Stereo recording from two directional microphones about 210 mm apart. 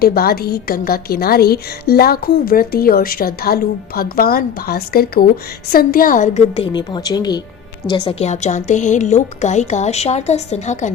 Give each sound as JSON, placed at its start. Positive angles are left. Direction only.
{"t": 0.0, "sound": "a woman's voice", "side_deg": 45}
{"t": 6.7, "sound": "a woman's voice", "side_deg": 20}